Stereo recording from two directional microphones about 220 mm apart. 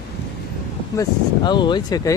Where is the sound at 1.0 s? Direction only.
20° left (ahead or behind).